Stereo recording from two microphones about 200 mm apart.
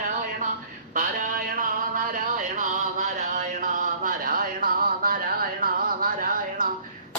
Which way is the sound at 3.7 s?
45° right (ahead or behind).